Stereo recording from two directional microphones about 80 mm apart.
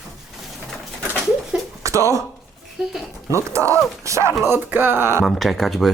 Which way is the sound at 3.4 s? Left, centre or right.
Right.